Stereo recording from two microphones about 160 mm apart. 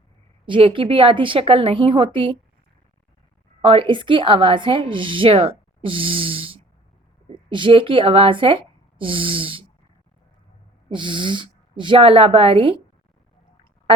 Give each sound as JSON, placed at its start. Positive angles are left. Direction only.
{"t": 0.4, "sound": "a woman's voice", "side_deg": -30}
{"t": 3.6, "sound": "a woman's voice", "side_deg": -35}
{"t": 10.8, "sound": "a woman's voice", "side_deg": -30}